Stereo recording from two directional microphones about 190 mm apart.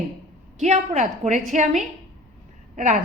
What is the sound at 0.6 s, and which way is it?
A woman's voice, 35° right (ahead or behind).